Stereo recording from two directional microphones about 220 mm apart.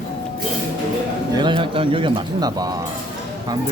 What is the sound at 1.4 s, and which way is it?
A man's voice, 20° right (ahead or behind).